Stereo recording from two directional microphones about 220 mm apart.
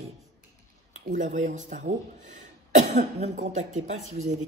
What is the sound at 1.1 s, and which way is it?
Speech, 35° right (ahead or behind).